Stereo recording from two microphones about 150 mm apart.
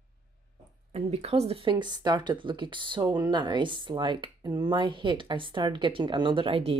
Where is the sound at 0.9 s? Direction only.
45° right (ahead or behind).